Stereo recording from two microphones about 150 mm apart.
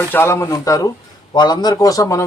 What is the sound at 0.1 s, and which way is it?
Speech, 15° left (ahead or behind).